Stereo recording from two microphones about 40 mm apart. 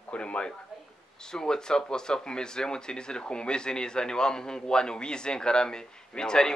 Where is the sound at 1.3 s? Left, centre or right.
Centre.